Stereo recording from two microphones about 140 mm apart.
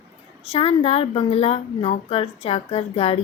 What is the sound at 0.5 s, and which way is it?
A woman's voice, 40° left (ahead or behind).